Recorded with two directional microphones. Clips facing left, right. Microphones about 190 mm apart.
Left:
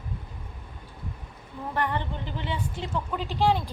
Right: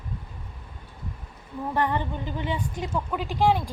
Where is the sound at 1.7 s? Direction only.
15° right (ahead or behind).